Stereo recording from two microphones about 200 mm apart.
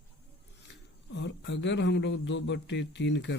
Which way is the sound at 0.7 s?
65° left (ahead or behind).